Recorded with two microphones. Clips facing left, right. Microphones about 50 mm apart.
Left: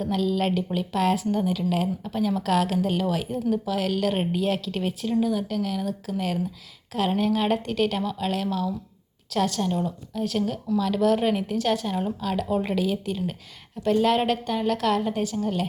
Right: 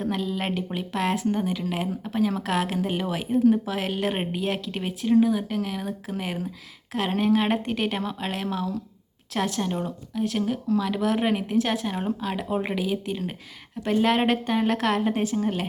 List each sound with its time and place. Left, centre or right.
0.1 s a woman's voice: centre